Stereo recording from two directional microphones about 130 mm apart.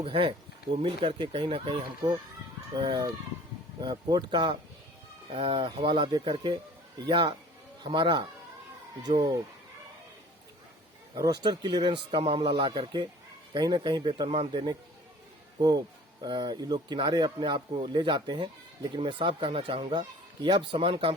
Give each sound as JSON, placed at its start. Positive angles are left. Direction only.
{"t": 0.0, "sound": "speech", "side_deg": -45}
{"t": 9.1, "sound": "speech", "side_deg": -60}
{"t": 11.1, "sound": "speech", "side_deg": -30}
{"t": 16.2, "sound": "speech", "side_deg": -35}